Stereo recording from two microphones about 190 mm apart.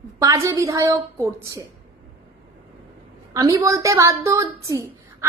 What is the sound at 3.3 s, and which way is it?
A woman's voice, 15° right (ahead or behind).